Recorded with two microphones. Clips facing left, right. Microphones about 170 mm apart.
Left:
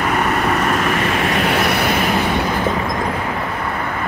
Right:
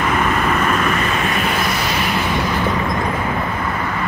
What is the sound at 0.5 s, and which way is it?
Vehicle, 75° left (ahead or behind).